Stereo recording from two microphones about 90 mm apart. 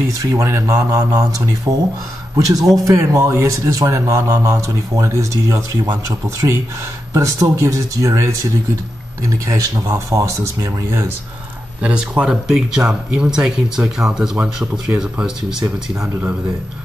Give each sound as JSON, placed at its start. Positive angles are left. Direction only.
{"t": 0.2, "sound": "speech", "side_deg": -35}
{"t": 11.8, "sound": "speech", "side_deg": -10}